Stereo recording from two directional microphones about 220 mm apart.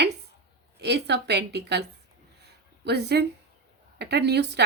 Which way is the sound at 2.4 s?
50° right (ahead or behind).